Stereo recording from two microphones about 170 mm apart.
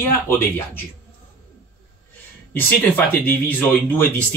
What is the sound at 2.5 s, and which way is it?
Speech, 10° left (ahead or behind).